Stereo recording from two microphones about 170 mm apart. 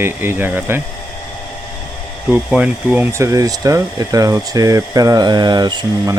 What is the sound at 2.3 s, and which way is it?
Speech, 5° right (ahead or behind).